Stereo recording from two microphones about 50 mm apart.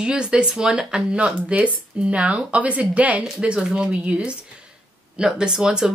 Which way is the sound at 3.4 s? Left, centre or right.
Centre.